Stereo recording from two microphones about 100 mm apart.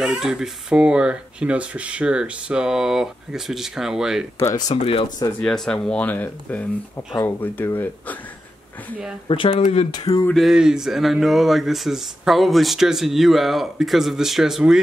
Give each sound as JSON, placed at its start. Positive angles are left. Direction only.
{"t": 0.0, "sound": "speech", "side_deg": -5}
{"t": 4.7, "sound": "speech", "side_deg": 70}
{"t": 5.4, "sound": "speech", "side_deg": 10}
{"t": 9.3, "sound": "speech", "side_deg": 60}
{"t": 9.8, "sound": "a sound", "side_deg": 40}
{"t": 10.3, "sound": "speech", "side_deg": -5}